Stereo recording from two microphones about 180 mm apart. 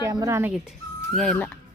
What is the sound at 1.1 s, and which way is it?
Speech, 5° left (ahead or behind).